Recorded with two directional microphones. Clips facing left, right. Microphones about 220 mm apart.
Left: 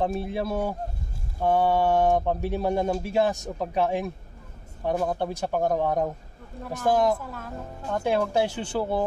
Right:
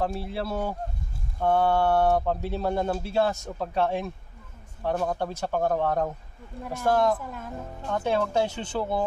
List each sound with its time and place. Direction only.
0.0 s speech: 20° left (ahead or behind)